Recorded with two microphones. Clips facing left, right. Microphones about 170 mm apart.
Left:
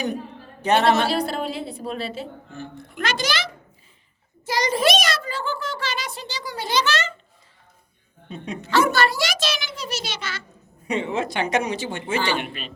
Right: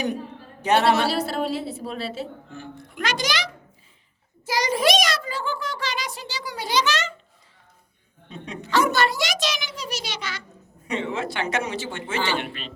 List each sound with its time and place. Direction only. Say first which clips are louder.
0.6 s a woman's voice: left 1 dB; 10° right (ahead or behind)
8.6 s a child's voice: left 1 dB; 15° right (ahead or behind)
10.8 s speech: left 3 dB; 15° left (ahead or behind)